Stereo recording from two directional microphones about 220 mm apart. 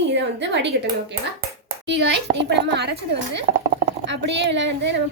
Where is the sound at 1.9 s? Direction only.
50° right (ahead or behind).